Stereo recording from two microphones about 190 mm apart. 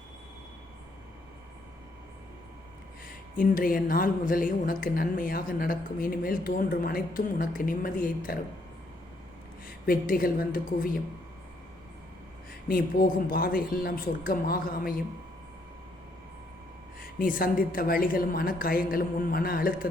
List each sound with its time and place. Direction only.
3.3 s a woman's voice: 45° left (ahead or behind)
9.6 s a woman's voice: 50° left (ahead or behind)
12.6 s a woman's voice: 50° left (ahead or behind)
17.0 s a woman's voice: 45° left (ahead or behind)